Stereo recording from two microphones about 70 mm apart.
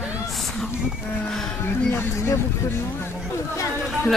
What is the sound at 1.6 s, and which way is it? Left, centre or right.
Speech, left.